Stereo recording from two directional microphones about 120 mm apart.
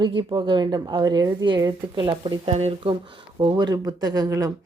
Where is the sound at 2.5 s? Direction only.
60° right (ahead or behind).